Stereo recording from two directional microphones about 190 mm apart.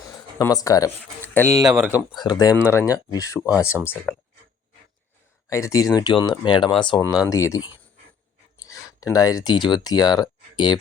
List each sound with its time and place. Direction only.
0.3 s speech: 20° left (ahead or behind)
1.6 s speech: 5° right (ahead or behind)
2.1 s speech: 20° left (ahead or behind); by 4.2 s 5° left (ahead or behind)
5.5 s speech: 15° left (ahead or behind)